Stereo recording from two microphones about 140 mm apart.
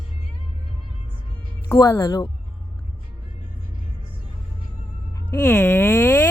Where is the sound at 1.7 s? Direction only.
15° left (ahead or behind).